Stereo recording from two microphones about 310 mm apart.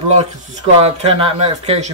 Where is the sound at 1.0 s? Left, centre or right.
Centre.